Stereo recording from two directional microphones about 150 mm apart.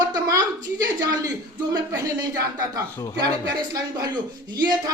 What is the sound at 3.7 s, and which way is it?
Speech, 25° right (ahead or behind).